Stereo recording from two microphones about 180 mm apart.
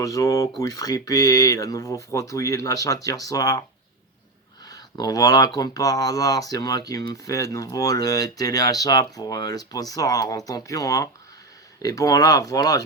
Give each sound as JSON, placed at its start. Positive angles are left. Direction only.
{"t": 0.0, "sound": "speech", "side_deg": 15}
{"t": 4.6, "sound": "speech", "side_deg": 20}